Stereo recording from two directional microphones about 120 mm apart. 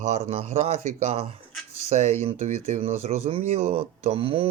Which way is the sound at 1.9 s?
75° right (ahead or behind).